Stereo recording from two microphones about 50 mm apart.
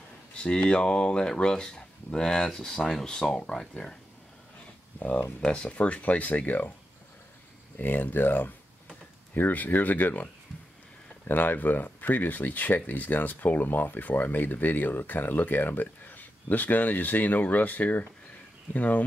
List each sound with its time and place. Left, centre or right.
0.3 s speech: centre
4.9 s speech: left
7.8 s speech: left